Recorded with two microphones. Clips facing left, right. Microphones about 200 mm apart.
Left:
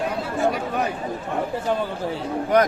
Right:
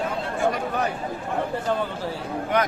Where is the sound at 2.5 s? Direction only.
40° left (ahead or behind).